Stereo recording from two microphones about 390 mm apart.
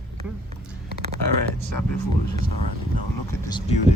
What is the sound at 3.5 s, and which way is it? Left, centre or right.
Speech, centre.